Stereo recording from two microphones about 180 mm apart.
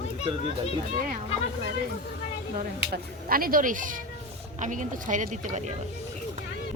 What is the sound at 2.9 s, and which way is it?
A woman's voice, 55° right (ahead or behind).